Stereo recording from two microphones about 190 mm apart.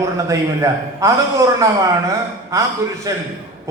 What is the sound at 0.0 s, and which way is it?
A man's voice, 15° right (ahead or behind).